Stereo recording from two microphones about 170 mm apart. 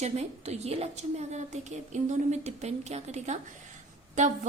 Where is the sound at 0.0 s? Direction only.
40° right (ahead or behind).